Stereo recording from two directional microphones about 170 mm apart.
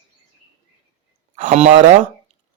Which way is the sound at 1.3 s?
50° right (ahead or behind).